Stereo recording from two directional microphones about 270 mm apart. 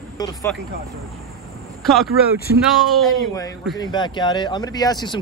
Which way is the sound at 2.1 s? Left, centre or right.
Left.